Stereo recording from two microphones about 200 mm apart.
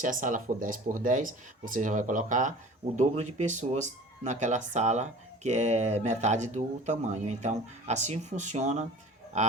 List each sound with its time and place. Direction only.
0.0 s speech: 40° right (ahead or behind)